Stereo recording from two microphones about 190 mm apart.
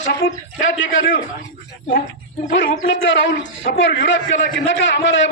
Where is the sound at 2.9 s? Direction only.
75° left (ahead or behind).